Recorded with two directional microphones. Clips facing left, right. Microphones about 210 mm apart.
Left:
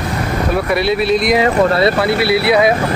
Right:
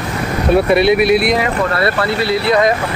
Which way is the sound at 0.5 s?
25° right (ahead or behind).